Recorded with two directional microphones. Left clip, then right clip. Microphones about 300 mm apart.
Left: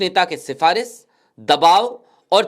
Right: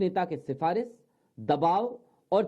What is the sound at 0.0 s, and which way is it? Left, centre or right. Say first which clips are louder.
A man's voice: left 11 dB; centre.